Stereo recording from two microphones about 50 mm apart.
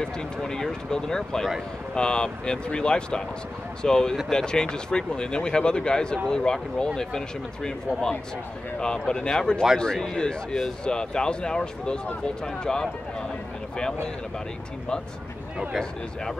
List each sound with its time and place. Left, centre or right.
0.4 s speech: centre